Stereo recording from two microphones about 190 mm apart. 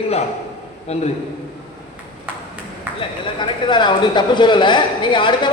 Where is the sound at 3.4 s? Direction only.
25° left (ahead or behind).